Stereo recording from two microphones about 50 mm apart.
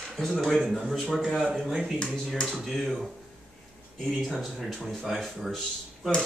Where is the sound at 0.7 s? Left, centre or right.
Centre.